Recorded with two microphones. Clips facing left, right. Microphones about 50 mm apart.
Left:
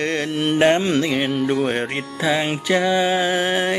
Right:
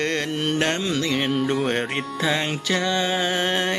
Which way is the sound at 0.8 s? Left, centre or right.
Left.